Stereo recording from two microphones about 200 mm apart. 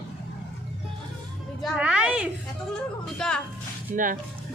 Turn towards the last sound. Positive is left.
turn(degrees=-40)  # may be behind; listen again after turning